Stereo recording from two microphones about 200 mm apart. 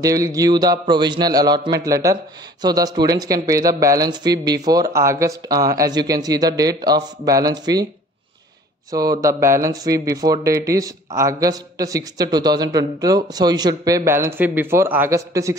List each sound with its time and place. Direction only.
0.0 s a man's voice: 15° right (ahead or behind)
8.9 s speech: 15° right (ahead or behind)